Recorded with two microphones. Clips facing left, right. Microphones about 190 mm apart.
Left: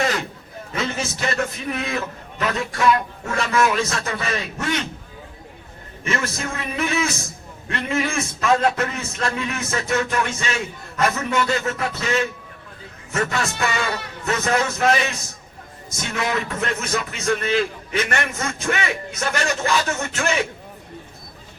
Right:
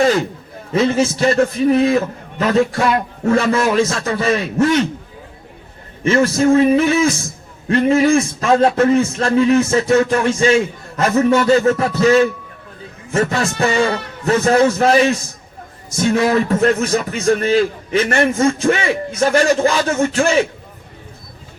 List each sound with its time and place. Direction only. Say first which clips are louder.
0.7 s a man's voice: right 11 dB; 30° right (ahead or behind)
6.1 s a man's voice: right 14 dB; 30° right (ahead or behind)